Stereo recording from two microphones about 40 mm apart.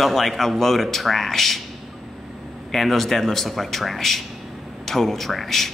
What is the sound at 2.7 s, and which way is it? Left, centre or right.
A man's voice, centre.